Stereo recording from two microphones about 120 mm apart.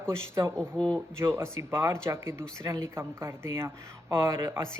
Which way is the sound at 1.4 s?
20° right (ahead or behind).